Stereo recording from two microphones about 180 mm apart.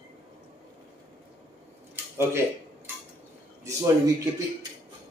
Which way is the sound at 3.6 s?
20° right (ahead or behind).